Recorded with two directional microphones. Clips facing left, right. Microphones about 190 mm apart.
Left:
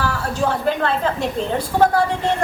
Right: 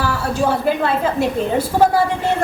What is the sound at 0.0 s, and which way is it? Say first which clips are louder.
A woman's voice: right 2 dB; 10° right (ahead or behind).